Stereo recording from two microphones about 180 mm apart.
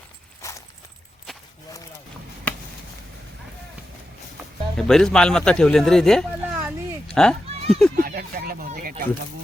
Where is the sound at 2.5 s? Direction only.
5° left (ahead or behind).